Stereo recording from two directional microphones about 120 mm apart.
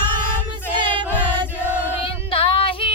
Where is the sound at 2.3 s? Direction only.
50° left (ahead or behind).